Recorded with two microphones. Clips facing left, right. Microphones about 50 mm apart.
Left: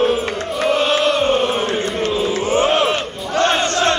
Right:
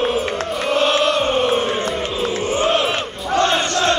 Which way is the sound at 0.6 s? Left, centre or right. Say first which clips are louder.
Left 1 dB; centre.